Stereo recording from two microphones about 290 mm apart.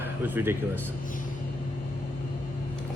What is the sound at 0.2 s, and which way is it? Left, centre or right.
Speech, centre.